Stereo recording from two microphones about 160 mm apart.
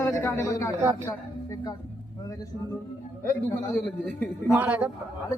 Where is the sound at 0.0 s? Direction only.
20° left (ahead or behind).